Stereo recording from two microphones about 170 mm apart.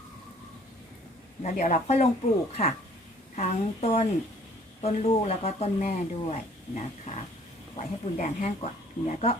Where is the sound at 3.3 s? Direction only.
40° left (ahead or behind).